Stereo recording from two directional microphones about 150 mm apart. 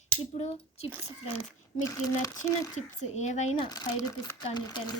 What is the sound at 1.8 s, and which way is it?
Speech, 20° left (ahead or behind).